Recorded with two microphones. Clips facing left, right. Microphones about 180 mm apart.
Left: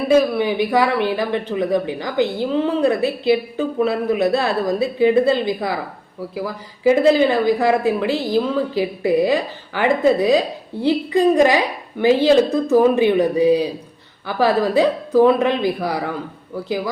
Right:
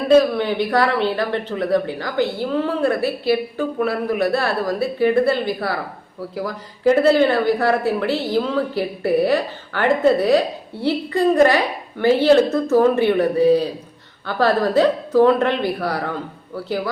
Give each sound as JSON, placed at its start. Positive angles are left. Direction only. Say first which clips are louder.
{"t": 0.1, "sound": "speech", "louder": "right 2 dB", "side_deg": 10}